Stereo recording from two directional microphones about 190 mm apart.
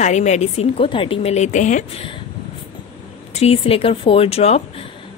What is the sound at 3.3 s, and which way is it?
A woman's voice, 30° left (ahead or behind).